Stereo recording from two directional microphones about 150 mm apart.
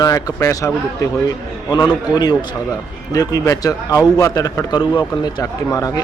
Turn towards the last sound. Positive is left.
turn(degrees=25)  # may be behind; listen again after turning